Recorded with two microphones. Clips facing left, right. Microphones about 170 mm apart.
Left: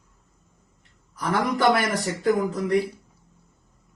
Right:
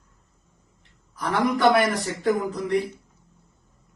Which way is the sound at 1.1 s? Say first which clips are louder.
Right 1 dB; centre (ahead or behind).